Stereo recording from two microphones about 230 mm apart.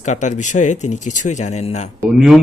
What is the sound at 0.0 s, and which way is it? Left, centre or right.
Speech, left.